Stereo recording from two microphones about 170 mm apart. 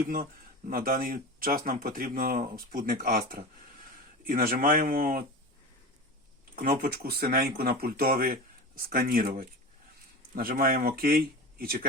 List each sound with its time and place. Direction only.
0.7 s speech: 60° right (ahead or behind)
6.6 s speech: 60° right (ahead or behind)